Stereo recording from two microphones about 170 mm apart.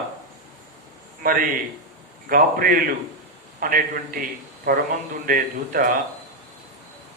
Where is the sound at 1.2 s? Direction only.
55° right (ahead or behind).